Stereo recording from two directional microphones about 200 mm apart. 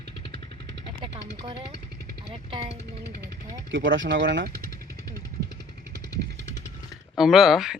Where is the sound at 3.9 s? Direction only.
65° right (ahead or behind).